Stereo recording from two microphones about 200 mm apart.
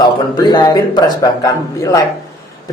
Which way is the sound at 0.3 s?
20° left (ahead or behind).